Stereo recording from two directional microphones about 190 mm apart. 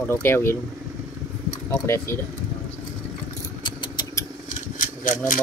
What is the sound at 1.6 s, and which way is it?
Speech, 15° left (ahead or behind).